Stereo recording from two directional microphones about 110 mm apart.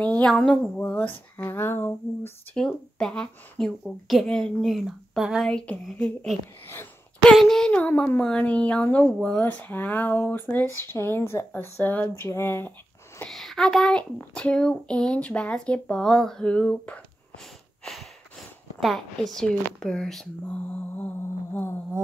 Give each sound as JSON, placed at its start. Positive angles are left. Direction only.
{"t": 0.0, "sound": "a sound", "side_deg": 10}
{"t": 0.7, "sound": "speech", "side_deg": 15}
{"t": 2.5, "sound": "a woman's voice", "side_deg": 5}
{"t": 13.3, "sound": "a woman's voice", "side_deg": 0}
{"t": 18.8, "sound": "a woman's voice", "side_deg": 0}